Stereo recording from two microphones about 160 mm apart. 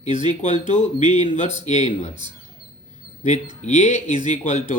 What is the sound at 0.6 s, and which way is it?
Speech, 50° left (ahead or behind).